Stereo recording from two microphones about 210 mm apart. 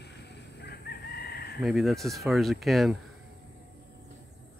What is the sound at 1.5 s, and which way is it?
Speech, centre (ahead or behind).